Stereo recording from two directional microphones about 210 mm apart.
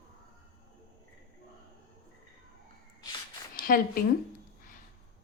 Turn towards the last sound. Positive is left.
turn(degrees=45)  # may be behind; listen again after turning